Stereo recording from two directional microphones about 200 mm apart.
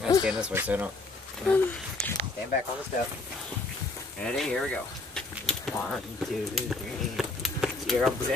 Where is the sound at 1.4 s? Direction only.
5° left (ahead or behind).